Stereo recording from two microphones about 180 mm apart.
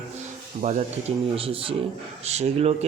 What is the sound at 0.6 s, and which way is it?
Speech, 40° right (ahead or behind).